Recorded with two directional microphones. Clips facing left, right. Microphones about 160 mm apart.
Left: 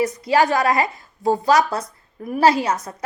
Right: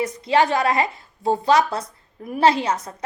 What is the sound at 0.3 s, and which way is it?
A woman's voice, 25° right (ahead or behind).